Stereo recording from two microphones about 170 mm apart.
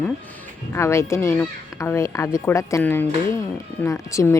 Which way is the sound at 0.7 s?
15° left (ahead or behind).